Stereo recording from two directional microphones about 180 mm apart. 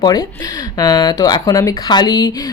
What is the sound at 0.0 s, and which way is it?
Speech, 20° left (ahead or behind).